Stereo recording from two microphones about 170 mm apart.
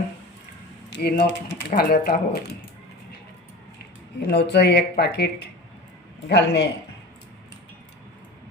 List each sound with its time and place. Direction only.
0.9 s speech: 80° left; by 2.1 s 60° left (ahead or behind)
4.2 s a man's voice: 80° left